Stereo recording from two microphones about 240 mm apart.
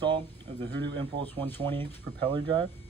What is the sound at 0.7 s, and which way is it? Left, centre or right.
Speech, right.